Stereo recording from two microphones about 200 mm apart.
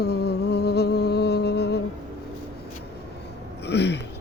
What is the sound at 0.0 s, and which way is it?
Humming, 55° left (ahead or behind).